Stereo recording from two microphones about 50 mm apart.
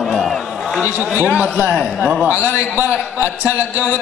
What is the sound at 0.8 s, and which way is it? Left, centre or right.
Speech, right.